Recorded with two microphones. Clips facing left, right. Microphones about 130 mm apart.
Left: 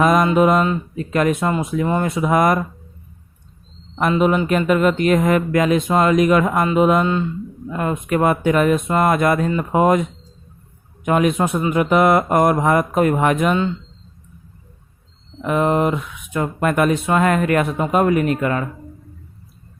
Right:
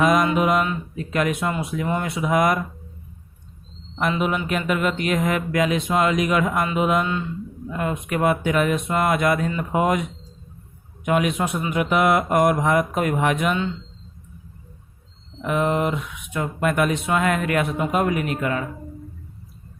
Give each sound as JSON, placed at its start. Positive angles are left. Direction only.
{"t": 0.0, "sound": "speech", "side_deg": 45}
{"t": 3.9, "sound": "a man's voice", "side_deg": 40}
{"t": 15.4, "sound": "speech", "side_deg": 45}